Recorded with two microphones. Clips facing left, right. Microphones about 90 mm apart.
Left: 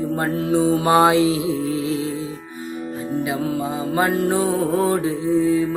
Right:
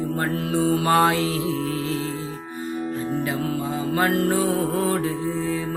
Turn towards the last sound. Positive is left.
turn(degrees=15)  # may be behind; listen again after turning